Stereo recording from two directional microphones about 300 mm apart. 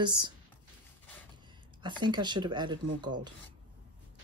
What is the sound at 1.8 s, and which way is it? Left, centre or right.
Speech, centre.